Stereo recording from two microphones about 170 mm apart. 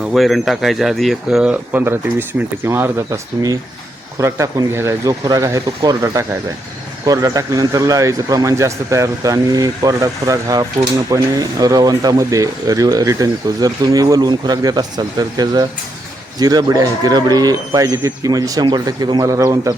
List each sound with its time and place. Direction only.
0.0 s speech: centre (ahead or behind); by 19.7 s 20° right (ahead or behind)